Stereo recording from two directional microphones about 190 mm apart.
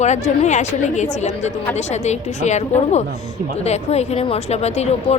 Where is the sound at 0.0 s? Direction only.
35° left (ahead or behind).